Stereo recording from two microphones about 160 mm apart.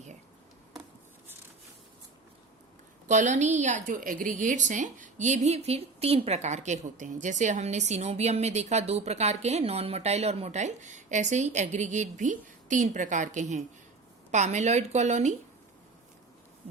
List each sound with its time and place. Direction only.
3.1 s a woman's voice: 50° right (ahead or behind)